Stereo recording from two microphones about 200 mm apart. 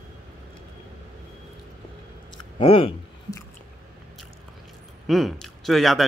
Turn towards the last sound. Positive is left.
turn(degrees=0)  # may be behind; listen again after turning